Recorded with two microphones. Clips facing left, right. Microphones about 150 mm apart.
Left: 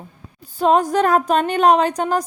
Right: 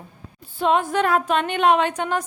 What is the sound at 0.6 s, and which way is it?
A woman's voice, 40° left (ahead or behind).